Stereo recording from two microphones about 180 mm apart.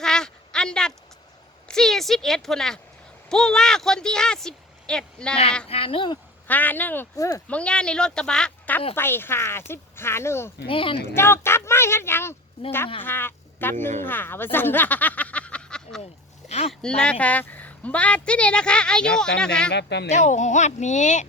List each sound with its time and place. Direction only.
0.0 s a sound: 5° left (ahead or behind)
3.2 s speech: 5° left (ahead or behind)
5.6 s speech: 30° left (ahead or behind)
6.5 s speech: 10° left (ahead or behind)
7.4 s speech: 5° left (ahead or behind)
10.7 s speech: 30° left (ahead or behind)
11.1 s speech: 15° left (ahead or behind)
16.5 s speech: 35° left (ahead or behind)
16.8 s speech: 5° left (ahead or behind)
19.7 s speech: 70° left (ahead or behind)
20.1 s speech: 40° left (ahead or behind)